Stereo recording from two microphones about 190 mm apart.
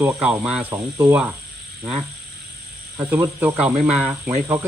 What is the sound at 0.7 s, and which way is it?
Speech, 15° right (ahead or behind).